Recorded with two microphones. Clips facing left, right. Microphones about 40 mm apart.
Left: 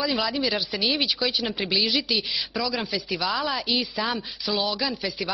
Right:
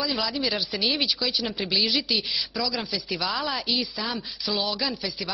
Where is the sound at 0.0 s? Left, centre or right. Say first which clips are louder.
Left 2 dB; centre.